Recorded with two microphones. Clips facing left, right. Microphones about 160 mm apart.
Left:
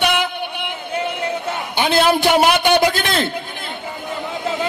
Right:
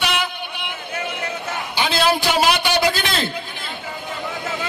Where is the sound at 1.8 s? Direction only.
55° left (ahead or behind).